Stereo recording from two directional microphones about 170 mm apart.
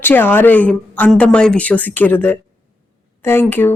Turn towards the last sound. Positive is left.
turn(degrees=10)  # may be behind; listen again after turning